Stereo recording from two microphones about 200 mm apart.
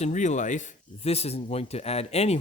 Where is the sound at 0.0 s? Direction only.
35° left (ahead or behind).